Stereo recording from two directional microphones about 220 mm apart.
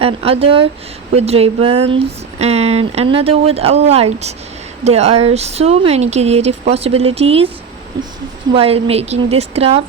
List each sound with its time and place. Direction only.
0.0 s speech: 25° right (ahead or behind)
8.5 s speech: 25° right (ahead or behind)